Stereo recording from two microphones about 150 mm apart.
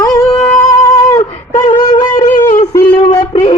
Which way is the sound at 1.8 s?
25° left (ahead or behind).